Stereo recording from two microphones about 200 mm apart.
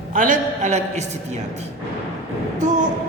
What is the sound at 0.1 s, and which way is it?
Speech, 40° right (ahead or behind).